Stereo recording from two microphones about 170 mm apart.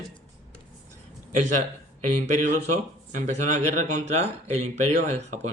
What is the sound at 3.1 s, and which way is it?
Speech, 45° right (ahead or behind).